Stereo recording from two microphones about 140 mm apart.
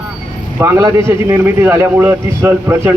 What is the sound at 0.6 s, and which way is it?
A man's voice, 20° right (ahead or behind).